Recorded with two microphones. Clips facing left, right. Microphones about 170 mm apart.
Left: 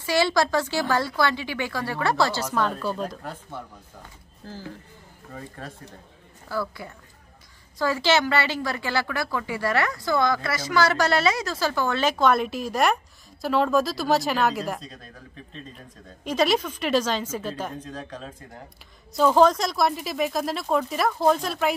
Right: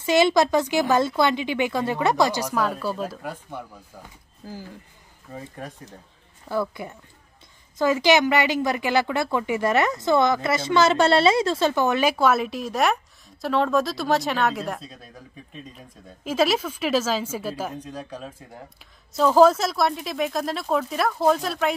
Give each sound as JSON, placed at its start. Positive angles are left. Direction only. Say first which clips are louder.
{"t": 0.0, "sound": "a woman's voice", "louder": "right 4 dB", "side_deg": -20}